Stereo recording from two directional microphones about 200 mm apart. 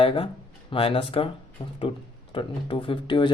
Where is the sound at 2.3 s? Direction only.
25° left (ahead or behind).